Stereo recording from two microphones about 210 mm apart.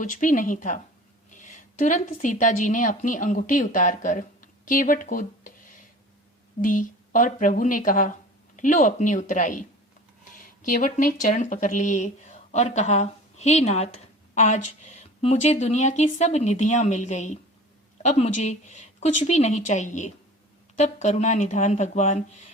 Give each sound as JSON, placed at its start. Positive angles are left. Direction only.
{"t": 0.0, "sound": "a woman's voice", "side_deg": 40}